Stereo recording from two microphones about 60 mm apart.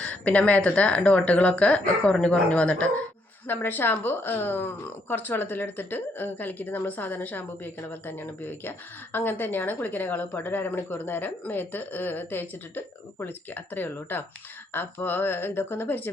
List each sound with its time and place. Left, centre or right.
0.0 s speech: left
3.4 s speech: left